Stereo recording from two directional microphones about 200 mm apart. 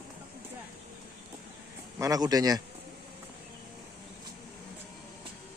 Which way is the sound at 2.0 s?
20° right (ahead or behind).